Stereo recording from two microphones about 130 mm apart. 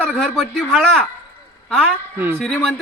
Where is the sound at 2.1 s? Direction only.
15° right (ahead or behind).